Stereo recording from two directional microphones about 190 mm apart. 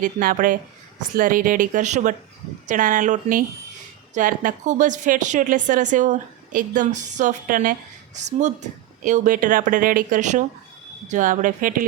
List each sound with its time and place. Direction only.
0.0 s speech: 45° right (ahead or behind)